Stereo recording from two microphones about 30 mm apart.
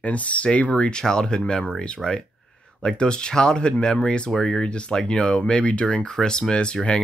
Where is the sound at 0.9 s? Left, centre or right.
Left.